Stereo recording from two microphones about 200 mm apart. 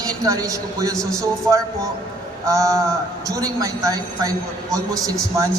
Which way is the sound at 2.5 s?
15° right (ahead or behind).